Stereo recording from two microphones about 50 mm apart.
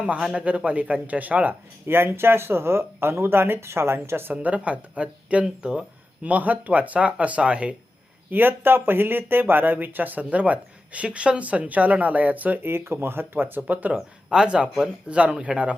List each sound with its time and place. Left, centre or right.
0.0 s speech: right
1.9 s speech: right
4.4 s speech: right
8.3 s speech: right
12.6 s speech: right
13.6 s speech: right
13.9 s speech: centre